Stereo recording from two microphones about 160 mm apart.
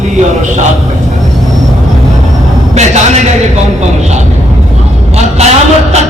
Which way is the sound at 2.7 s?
45° right (ahead or behind).